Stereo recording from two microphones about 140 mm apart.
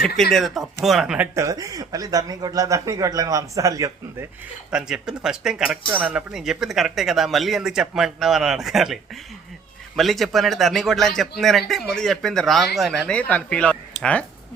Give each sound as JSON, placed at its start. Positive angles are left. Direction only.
{"t": 0.0, "sound": "a man's voice", "side_deg": 0}
{"t": 1.4, "sound": "a man's voice", "side_deg": -25}
{"t": 4.7, "sound": "a man's voice", "side_deg": -5}